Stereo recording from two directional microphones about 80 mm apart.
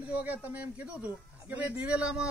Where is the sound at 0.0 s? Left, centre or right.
Centre.